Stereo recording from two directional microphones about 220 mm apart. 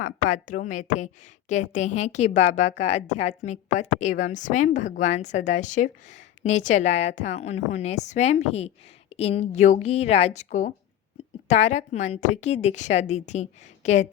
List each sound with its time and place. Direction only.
0.0 s a woman's voice: 35° left (ahead or behind)